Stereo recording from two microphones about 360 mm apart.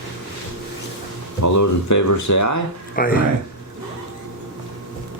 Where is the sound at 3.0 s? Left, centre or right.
Left.